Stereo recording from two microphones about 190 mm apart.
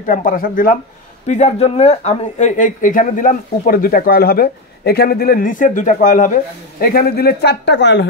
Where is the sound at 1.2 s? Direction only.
35° left (ahead or behind).